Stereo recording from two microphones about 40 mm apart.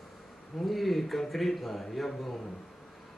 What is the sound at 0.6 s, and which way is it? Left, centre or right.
Speech, centre.